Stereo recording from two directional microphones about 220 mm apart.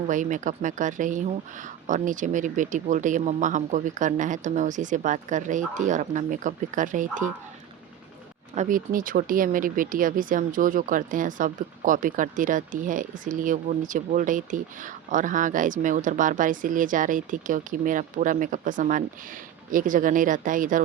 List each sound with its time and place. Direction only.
0.1 s speech: 35° right (ahead or behind)
8.5 s speech: 40° right (ahead or behind)